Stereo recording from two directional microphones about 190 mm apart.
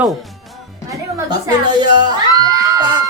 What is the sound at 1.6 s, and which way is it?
Speech, 25° right (ahead or behind).